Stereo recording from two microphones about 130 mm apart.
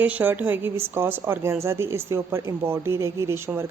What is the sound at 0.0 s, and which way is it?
A woman's voice, 15° right (ahead or behind).